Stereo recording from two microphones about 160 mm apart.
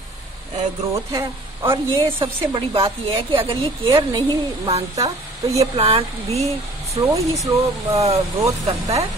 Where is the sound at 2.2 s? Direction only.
35° right (ahead or behind).